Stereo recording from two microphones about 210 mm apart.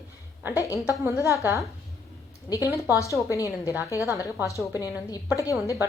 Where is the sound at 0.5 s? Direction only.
15° left (ahead or behind).